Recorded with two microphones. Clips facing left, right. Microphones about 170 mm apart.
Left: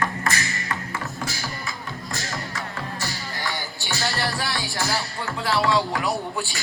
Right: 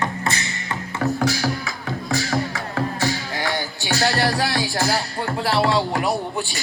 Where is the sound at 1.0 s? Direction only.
70° right (ahead or behind).